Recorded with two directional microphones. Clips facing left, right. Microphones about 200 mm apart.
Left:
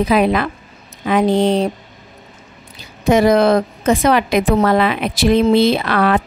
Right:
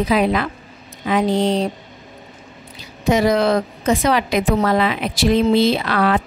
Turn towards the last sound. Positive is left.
turn(degrees=60)  # may be behind; listen again after turning